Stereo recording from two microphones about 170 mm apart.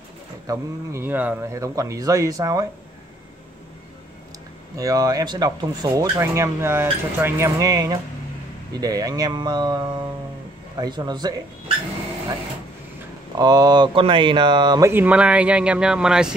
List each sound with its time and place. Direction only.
0.5 s speech: 15° right (ahead or behind)
4.7 s speech: 20° right (ahead or behind)
13.4 s speech: 25° right (ahead or behind)
14.9 s speech: 10° right (ahead or behind)